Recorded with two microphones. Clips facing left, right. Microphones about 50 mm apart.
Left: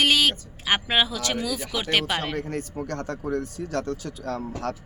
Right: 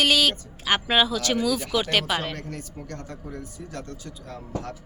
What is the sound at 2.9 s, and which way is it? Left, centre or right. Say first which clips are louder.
Speech: left 10 dB; left.